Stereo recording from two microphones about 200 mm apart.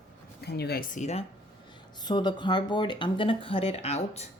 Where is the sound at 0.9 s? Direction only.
35° left (ahead or behind).